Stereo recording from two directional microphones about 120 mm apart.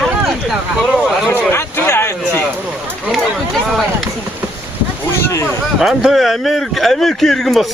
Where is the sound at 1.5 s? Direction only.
20° left (ahead or behind).